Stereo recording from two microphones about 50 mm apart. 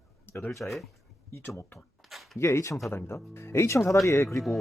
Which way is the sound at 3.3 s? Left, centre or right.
Left.